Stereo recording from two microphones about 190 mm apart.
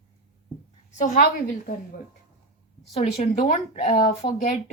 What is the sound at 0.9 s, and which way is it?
Speech, 45° left (ahead or behind).